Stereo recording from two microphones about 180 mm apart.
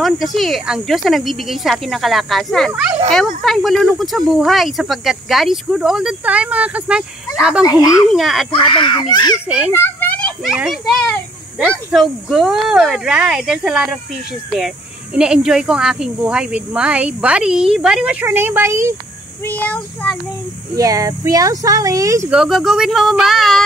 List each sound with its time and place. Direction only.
0.0 s speech: centre (ahead or behind)
7.6 s a child's voice: 20° left (ahead or behind)
8.1 s speech: centre (ahead or behind)
8.5 s a child's voice: 30° left (ahead or behind)
9.7 s children playing: 10° left (ahead or behind)
10.4 s speech: 5° right (ahead or behind)
15.1 s speech: 5° right (ahead or behind)
19.4 s child singing: 10° left (ahead or behind)
20.7 s speech: 20° right (ahead or behind)
22.3 s speech: centre (ahead or behind)